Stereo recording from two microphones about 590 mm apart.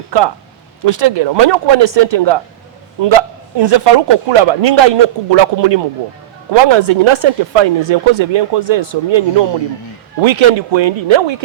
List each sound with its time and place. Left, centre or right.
0.1 s a man's voice: right